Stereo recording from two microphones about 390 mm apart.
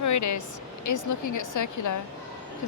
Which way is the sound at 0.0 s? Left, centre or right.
Left.